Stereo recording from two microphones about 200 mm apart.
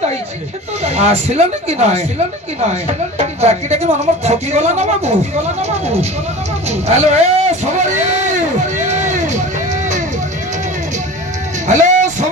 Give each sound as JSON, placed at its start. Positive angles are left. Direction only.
{"t": 0.8, "sound": "speech", "side_deg": -30}
{"t": 6.7, "sound": "speech", "side_deg": -35}
{"t": 8.5, "sound": "music", "side_deg": -35}
{"t": 11.6, "sound": "a sound", "side_deg": -35}